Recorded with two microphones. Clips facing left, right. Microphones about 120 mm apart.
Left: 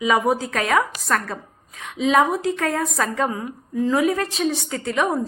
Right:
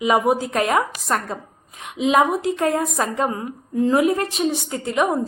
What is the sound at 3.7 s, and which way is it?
Speech, 55° right (ahead or behind).